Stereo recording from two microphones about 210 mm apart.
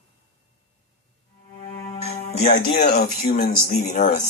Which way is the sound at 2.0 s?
30° left (ahead or behind).